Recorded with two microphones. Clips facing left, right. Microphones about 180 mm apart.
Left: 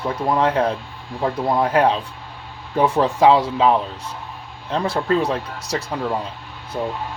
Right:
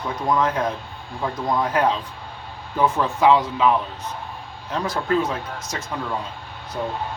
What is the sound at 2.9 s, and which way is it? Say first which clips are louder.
Speech: left 3 dB; 35° left (ahead or behind).